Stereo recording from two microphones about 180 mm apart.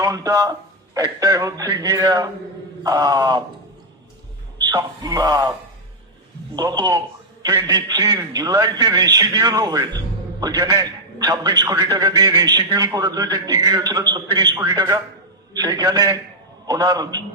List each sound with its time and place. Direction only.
0.0 s a man's voice: 20° right (ahead or behind)
4.5 s speech: 20° right (ahead or behind)
6.6 s a man's voice: 25° right (ahead or behind)